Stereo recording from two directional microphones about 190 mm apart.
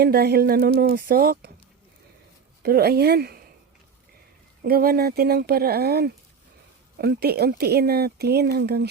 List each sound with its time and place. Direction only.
0.0 s speech: 55° right (ahead or behind)
2.6 s speech: 55° right (ahead or behind)
4.6 s speech: 50° right (ahead or behind)